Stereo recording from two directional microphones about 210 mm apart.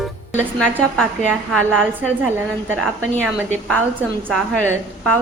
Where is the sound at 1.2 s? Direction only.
Centre (ahead or behind).